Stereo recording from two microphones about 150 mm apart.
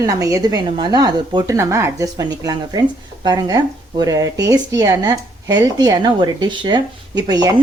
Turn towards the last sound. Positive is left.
turn(degrees=-25)  # may be behind; listen again after turning